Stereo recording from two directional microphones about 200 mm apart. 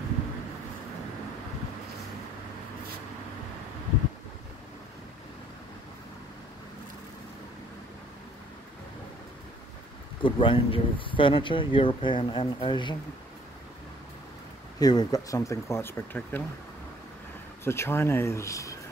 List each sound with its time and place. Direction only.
10.2 s speech: 25° left (ahead or behind)
14.8 s speech: 20° left (ahead or behind)
17.6 s speech: 10° left (ahead or behind)